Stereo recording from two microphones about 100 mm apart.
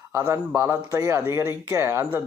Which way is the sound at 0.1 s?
30° right (ahead or behind).